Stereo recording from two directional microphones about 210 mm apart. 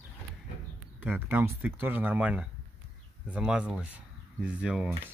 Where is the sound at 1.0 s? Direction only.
10° right (ahead or behind).